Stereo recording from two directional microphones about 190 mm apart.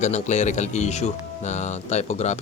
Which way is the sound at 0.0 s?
35° left (ahead or behind).